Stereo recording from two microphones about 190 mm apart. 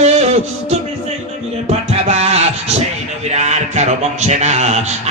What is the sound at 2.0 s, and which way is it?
Music, 35° right (ahead or behind).